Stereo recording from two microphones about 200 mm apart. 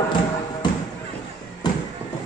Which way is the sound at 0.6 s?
20° left (ahead or behind).